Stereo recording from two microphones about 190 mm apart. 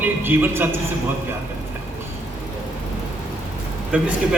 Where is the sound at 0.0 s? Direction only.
10° right (ahead or behind).